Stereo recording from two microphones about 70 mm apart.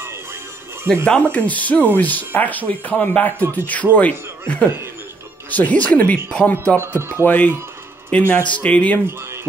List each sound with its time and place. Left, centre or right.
1.0 s speech: centre
6.8 s speech: right
7.2 s speech: left